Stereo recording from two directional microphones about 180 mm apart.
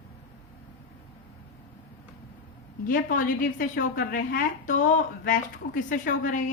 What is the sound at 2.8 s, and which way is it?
A woman's voice, 50° left (ahead or behind).